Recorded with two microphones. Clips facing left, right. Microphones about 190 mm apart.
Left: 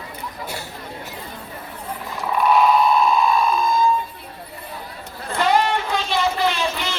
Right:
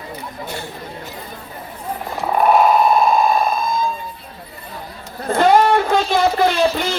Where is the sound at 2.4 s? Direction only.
50° right (ahead or behind).